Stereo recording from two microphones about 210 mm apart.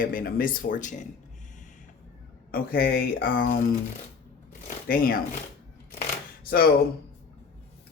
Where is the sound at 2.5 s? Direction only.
45° left (ahead or behind).